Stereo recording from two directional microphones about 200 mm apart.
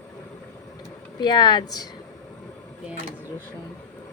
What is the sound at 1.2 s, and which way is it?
Speech, 20° left (ahead or behind).